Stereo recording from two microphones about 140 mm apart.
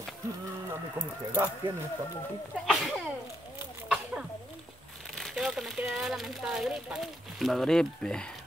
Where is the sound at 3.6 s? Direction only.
10° right (ahead or behind).